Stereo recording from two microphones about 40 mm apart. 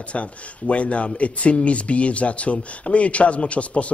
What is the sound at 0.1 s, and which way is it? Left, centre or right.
Speech, left.